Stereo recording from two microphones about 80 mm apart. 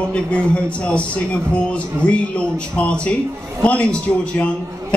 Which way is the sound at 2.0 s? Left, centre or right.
Centre.